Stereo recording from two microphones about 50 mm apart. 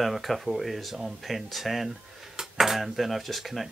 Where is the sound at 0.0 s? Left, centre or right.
Centre.